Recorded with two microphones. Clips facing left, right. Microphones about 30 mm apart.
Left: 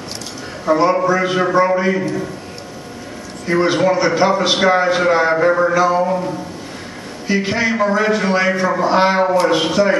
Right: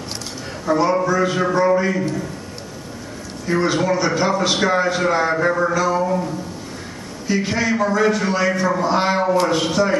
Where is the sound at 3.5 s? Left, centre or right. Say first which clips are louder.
Left 4 dB; centre.